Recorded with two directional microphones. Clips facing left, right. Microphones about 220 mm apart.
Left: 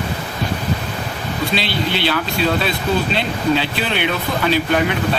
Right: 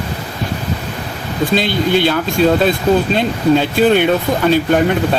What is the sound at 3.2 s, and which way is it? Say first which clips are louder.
Speech: right 5 dB; 50° right (ahead or behind).